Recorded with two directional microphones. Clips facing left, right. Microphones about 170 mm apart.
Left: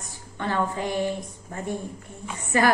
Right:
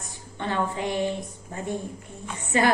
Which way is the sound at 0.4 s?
20° right (ahead or behind).